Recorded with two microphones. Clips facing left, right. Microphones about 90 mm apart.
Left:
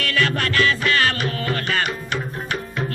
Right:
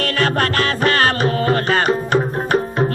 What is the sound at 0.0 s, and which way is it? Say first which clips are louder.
Music: right 4 dB; 40° right (ahead or behind).